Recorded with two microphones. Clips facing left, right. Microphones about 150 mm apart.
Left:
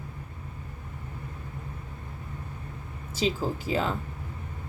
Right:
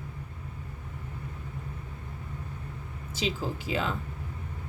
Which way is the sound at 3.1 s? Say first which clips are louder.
Left 4 dB; 40° left (ahead or behind).